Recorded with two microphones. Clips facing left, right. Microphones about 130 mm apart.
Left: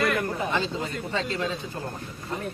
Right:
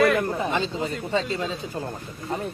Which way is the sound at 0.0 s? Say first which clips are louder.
Right 6 dB; centre (ahead or behind).